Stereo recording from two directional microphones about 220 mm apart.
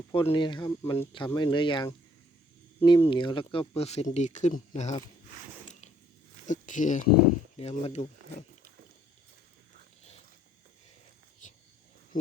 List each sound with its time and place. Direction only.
0.1 s speech: 25° left (ahead or behind)
6.5 s speech: 35° left (ahead or behind)
11.4 s a sound: 35° left (ahead or behind)
12.1 s speech: 40° left (ahead or behind)